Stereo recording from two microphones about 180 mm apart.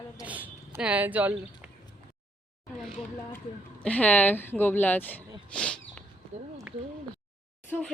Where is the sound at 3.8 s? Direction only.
10° left (ahead or behind).